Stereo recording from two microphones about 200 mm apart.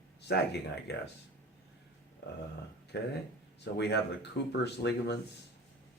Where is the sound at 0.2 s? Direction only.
55° left (ahead or behind).